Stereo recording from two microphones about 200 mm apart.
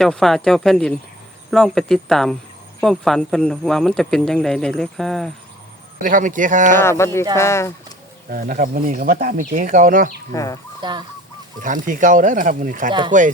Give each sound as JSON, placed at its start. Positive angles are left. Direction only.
{"t": 0.0, "sound": "speech", "side_deg": 0}
{"t": 6.0, "sound": "speech", "side_deg": -40}
{"t": 6.7, "sound": "speech", "side_deg": 15}
{"t": 8.3, "sound": "speech", "side_deg": -45}
{"t": 10.3, "sound": "speech", "side_deg": 15}
{"t": 10.8, "sound": "goose", "side_deg": -20}
{"t": 11.6, "sound": "speech", "side_deg": -40}
{"t": 12.9, "sound": "speech", "side_deg": -25}